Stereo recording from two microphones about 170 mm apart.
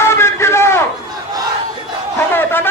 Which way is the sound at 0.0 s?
15° left (ahead or behind).